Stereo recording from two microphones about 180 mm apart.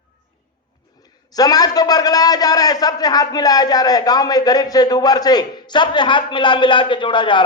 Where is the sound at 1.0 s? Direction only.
20° left (ahead or behind).